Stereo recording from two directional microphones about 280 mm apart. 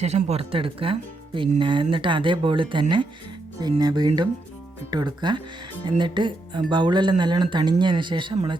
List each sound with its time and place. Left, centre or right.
0.0 s speech: right